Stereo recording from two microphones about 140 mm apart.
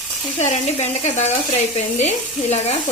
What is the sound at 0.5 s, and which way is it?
Frying, 50° left (ahead or behind).